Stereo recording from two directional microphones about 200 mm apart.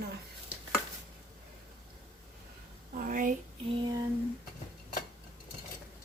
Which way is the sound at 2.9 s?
45° right (ahead or behind).